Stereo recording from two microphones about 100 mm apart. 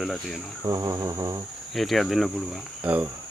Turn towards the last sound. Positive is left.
turn(degrees=-15)  # may be behind; listen again after turning